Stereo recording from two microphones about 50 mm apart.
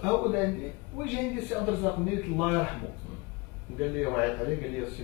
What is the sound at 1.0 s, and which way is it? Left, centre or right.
Speech, centre.